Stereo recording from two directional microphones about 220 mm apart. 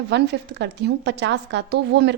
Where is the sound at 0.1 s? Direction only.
50° right (ahead or behind).